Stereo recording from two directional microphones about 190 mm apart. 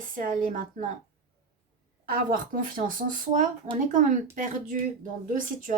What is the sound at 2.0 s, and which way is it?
Speech, 45° right (ahead or behind).